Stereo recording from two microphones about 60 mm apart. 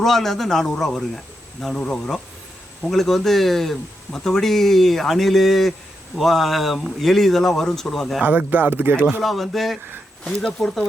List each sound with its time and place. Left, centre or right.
0.0 s speech: centre
8.2 s speech: right
9.2 s speech: centre